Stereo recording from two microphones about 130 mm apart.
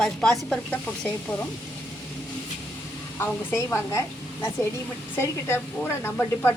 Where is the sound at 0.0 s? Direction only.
5° left (ahead or behind).